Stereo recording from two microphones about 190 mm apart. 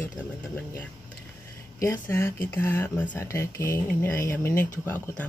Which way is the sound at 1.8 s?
15° left (ahead or behind).